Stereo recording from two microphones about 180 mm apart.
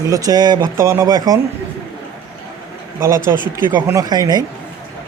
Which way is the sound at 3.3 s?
20° right (ahead or behind).